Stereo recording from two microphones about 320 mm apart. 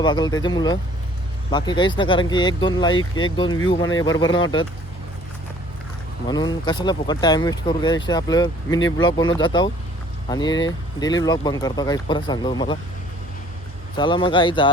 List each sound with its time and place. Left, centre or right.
0.0 s speech: centre
6.2 s speech: centre
13.9 s speech: centre